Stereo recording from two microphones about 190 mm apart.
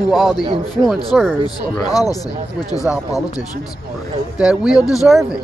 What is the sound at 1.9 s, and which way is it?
Speech, 20° left (ahead or behind).